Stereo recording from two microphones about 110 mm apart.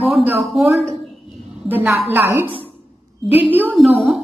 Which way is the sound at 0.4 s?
Centre (ahead or behind).